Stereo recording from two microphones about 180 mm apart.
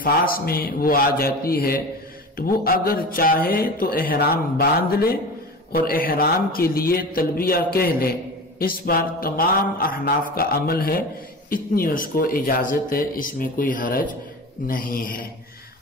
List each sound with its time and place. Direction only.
0.0 s a man's voice: 55° left (ahead or behind)